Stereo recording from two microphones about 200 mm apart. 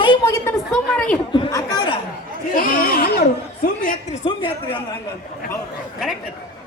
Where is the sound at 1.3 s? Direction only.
20° left (ahead or behind).